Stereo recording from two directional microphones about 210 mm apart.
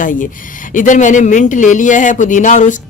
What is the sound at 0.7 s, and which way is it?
Speech, 35° left (ahead or behind).